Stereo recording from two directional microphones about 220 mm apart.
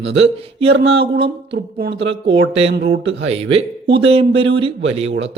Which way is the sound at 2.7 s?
50° right (ahead or behind).